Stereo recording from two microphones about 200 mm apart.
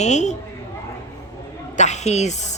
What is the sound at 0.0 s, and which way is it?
Speech, 35° left (ahead or behind).